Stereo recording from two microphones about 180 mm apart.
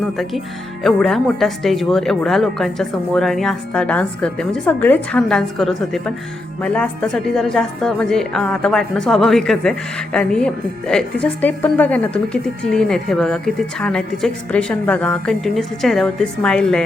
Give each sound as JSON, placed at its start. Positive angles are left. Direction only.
{"t": 0.0, "sound": "a woman's voice", "side_deg": 0}